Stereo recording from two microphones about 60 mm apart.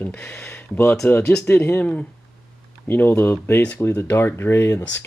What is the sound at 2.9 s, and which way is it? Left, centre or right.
Speech, left.